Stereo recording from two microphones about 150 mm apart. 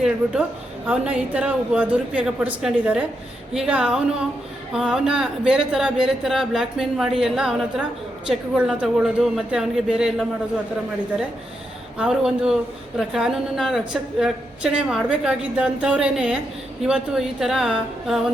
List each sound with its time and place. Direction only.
0.9 s a woman's voice: 10° right (ahead or behind)
11.9 s a woman's voice: 5° right (ahead or behind)